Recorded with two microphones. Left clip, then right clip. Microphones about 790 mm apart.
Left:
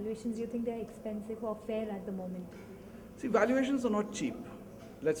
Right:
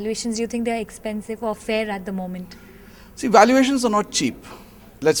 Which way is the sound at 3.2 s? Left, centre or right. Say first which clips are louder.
Right 15 dB; right.